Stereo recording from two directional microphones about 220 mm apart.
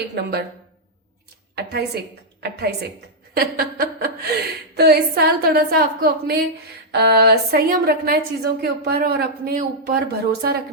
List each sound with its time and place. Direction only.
0.2 s speech: 50° right (ahead or behind)
1.5 s speech: 45° right (ahead or behind)